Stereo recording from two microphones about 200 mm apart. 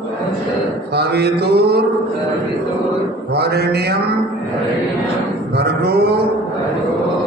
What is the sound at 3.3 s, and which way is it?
Speech, 55° right (ahead or behind).